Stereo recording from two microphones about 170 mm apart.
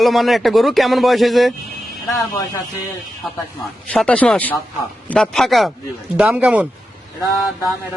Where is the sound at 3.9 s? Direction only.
5° left (ahead or behind); by 6.7 s 10° right (ahead or behind).